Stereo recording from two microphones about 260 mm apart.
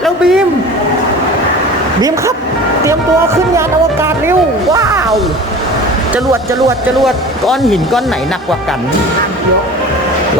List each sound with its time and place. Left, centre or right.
0.0 s a sound: centre
2.0 s speech: centre
4.0 s speech: centre
7.0 s speech: centre